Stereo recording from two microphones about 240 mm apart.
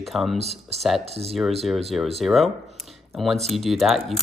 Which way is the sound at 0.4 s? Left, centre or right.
Right.